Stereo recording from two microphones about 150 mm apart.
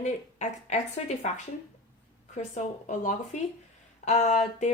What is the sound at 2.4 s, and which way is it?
A woman's voice, 50° left (ahead or behind).